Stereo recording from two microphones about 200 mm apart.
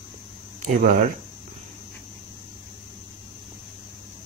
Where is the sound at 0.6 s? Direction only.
40° right (ahead or behind).